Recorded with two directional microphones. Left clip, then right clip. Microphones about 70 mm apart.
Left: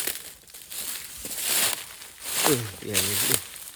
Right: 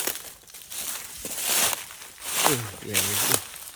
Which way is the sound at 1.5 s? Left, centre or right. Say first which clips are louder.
Right 1 dB; centre.